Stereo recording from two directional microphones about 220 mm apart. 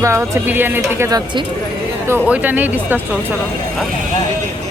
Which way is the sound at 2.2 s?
5° right (ahead or behind).